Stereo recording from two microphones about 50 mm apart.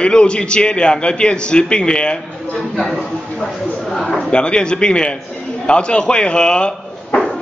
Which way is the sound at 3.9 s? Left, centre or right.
Centre.